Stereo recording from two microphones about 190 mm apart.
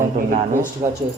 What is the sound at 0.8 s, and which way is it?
Speech, 15° right (ahead or behind).